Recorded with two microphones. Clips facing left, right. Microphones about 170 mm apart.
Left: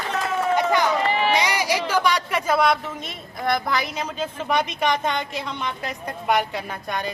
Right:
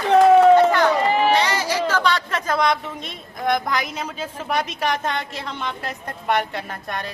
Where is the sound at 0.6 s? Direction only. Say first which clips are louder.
Right 5 dB; 15° left (ahead or behind).